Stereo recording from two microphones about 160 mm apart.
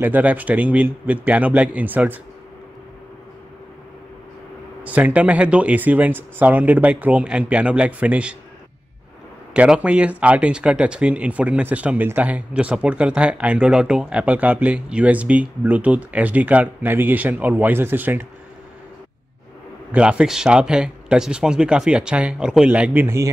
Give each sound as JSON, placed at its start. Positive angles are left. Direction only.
{"t": 0.0, "sound": "speech", "side_deg": -10}
{"t": 4.8, "sound": "speech", "side_deg": -10}
{"t": 9.5, "sound": "speech", "side_deg": -5}
{"t": 19.9, "sound": "speech", "side_deg": -5}